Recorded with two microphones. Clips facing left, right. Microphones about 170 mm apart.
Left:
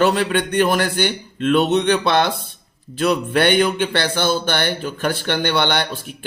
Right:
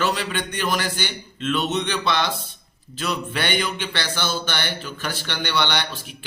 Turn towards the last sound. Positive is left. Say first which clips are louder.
# left 5 dB
turn(degrees=50)  # may be behind; listen again after turning